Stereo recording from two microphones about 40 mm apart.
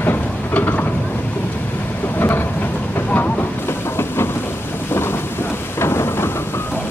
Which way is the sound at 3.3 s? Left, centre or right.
Left.